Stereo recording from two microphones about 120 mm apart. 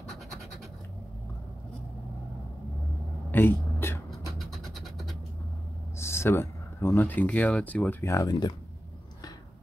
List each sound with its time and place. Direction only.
3.3 s a sound: 15° left (ahead or behind)
4.3 s vehicle: centre (ahead or behind)
5.9 s speech: 20° left (ahead or behind)